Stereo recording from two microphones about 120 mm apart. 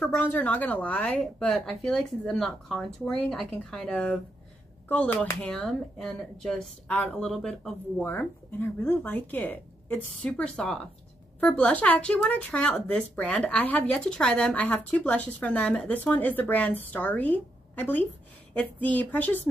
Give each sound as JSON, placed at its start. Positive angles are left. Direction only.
{"t": 0.1, "sound": "speech", "side_deg": 15}
{"t": 8.0, "sound": "speech", "side_deg": 15}